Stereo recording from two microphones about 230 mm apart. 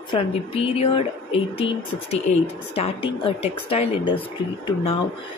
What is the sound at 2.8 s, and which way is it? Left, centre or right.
Speech, left.